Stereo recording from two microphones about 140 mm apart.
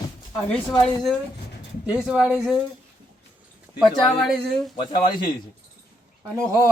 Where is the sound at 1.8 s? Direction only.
5° right (ahead or behind).